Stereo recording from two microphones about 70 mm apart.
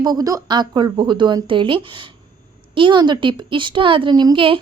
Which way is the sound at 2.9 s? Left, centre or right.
Right.